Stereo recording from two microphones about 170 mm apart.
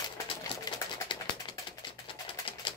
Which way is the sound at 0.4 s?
25° left (ahead or behind).